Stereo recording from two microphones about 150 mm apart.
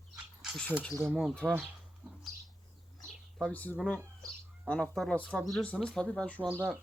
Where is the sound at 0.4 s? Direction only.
Centre (ahead or behind).